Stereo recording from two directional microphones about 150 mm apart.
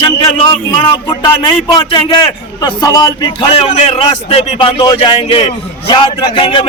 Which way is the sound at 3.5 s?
45° left (ahead or behind).